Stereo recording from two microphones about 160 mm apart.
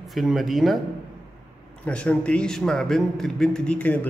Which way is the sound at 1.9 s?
10° left (ahead or behind).